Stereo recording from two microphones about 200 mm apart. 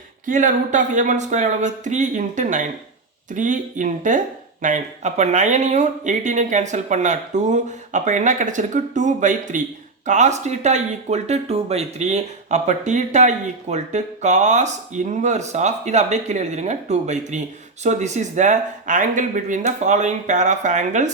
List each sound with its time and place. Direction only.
0.3 s speech: 40° right (ahead or behind)